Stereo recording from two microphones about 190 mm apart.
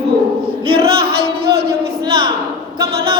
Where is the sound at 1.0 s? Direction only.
55° right (ahead or behind).